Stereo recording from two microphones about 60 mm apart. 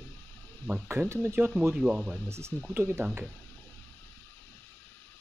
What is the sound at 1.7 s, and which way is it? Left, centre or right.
Speech, centre.